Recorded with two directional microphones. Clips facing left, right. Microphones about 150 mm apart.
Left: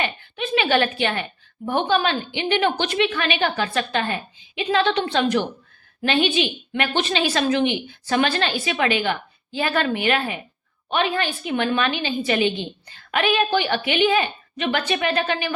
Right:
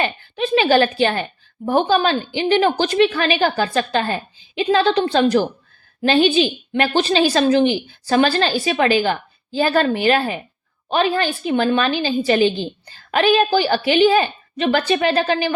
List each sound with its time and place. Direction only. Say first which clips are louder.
0.0 s a woman's voice: right 5 dB; 35° right (ahead or behind)